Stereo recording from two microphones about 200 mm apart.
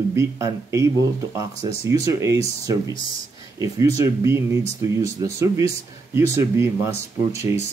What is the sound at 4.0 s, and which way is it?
Speech, 15° right (ahead or behind).